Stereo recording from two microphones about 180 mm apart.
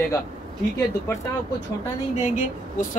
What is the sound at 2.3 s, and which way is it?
Speech, 45° left (ahead or behind).